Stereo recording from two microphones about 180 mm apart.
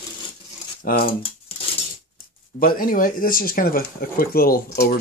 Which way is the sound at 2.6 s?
50° left (ahead or behind).